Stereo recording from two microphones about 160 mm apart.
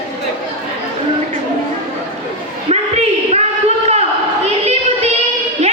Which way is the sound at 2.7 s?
40° right (ahead or behind).